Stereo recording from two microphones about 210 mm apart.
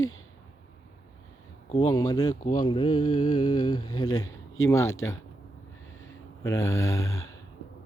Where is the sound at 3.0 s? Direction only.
90° left.